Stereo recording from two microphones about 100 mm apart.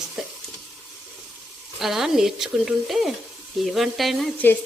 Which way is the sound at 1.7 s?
5° right (ahead or behind).